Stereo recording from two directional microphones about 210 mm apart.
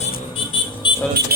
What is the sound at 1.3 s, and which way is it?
Speech, 45° right (ahead or behind).